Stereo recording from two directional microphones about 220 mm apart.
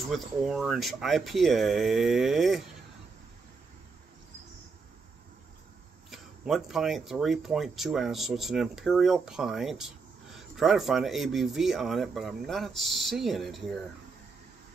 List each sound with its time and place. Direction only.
0.1 s speech: centre (ahead or behind)
6.0 s speech: centre (ahead or behind)